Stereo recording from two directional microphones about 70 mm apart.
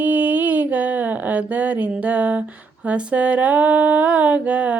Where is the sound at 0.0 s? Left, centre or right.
Right.